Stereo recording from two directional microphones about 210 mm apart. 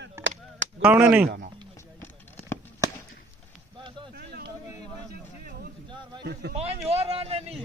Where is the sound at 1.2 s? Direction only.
50° right (ahead or behind).